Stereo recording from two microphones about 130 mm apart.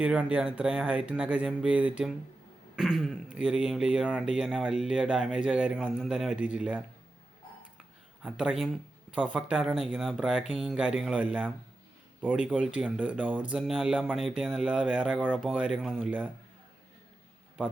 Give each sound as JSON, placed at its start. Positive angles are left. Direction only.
{"t": 0.0, "sound": "speech", "side_deg": -10}
{"t": 8.2, "sound": "speech", "side_deg": -5}